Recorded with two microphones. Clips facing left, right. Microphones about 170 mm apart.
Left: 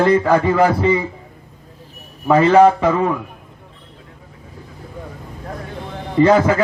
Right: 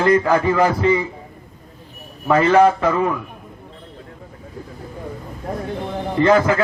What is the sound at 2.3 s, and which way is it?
Speech, 15° left (ahead or behind).